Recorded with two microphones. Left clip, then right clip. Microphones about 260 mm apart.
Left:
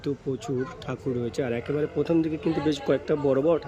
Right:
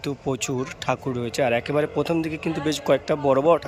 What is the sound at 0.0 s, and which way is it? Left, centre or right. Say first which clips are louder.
Speech: right 3 dB; centre.